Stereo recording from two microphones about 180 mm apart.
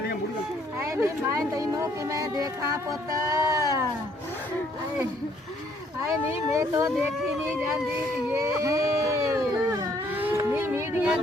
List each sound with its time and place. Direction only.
0.8 s speech: 15° right (ahead or behind)
6.1 s speech: 15° right (ahead or behind)
8.3 s a sound: 15° right (ahead or behind)